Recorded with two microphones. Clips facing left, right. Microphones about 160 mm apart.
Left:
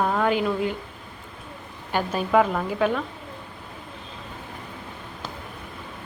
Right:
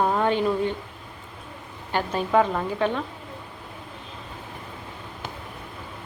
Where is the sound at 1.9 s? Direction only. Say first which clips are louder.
Left 1 dB; 10° left (ahead or behind).